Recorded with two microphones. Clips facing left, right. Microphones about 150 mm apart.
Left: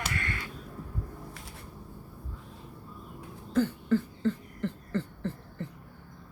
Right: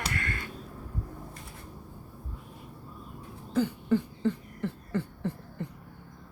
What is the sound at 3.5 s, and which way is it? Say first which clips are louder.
Cough: even; 15° right (ahead or behind).